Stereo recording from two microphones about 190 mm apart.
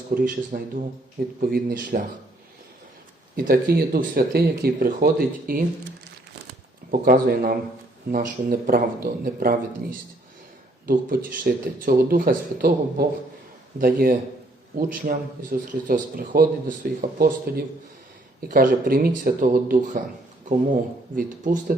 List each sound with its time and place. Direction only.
0.1 s speech: 50° right (ahead or behind)
3.3 s speech: 50° right (ahead or behind)
6.9 s speech: 50° right (ahead or behind)
10.8 s speech: 50° right (ahead or behind)
21.2 s speech: 45° right (ahead or behind)